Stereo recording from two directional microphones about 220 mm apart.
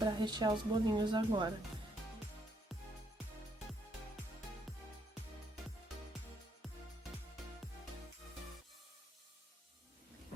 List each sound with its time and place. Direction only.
0.0 s a woman's voice: 20° right (ahead or behind)
4.7 s music: centre (ahead or behind)